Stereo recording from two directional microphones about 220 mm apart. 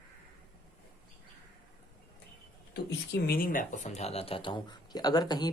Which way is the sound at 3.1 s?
40° left (ahead or behind).